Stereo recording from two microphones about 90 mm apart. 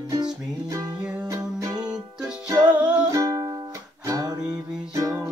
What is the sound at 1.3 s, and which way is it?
Music, 45° right (ahead or behind).